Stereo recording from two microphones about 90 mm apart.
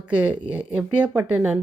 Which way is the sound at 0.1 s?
15° right (ahead or behind).